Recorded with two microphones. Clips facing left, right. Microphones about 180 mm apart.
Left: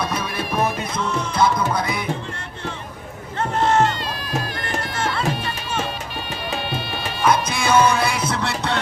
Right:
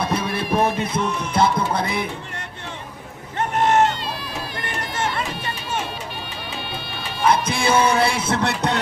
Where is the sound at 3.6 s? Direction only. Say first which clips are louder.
Right 1 dB; 20° right (ahead or behind).